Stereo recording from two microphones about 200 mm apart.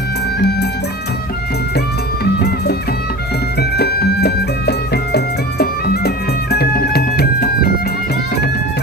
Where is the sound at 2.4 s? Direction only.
55° left (ahead or behind).